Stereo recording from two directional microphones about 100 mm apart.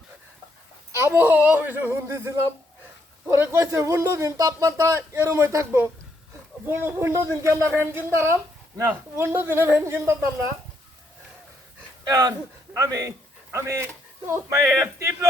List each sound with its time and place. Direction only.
1.0 s a man's voice: 20° right (ahead or behind)
12.0 s speech: 40° right (ahead or behind)